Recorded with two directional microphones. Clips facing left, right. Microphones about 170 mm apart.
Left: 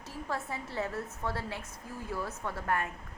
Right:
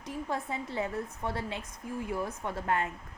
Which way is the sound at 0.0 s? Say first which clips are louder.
Right 3 dB; 20° right (ahead or behind).